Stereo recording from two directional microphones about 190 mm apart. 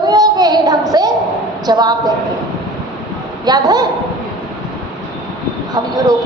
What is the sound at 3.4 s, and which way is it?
Speech, 20° right (ahead or behind).